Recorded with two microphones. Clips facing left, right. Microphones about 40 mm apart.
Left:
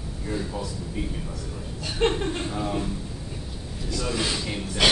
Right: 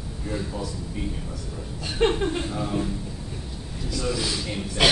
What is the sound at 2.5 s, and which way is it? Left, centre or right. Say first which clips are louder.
Speech: even; centre.